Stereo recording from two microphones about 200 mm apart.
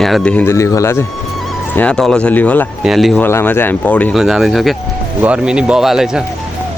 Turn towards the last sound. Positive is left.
turn(degrees=-5)  # may be behind; listen again after turning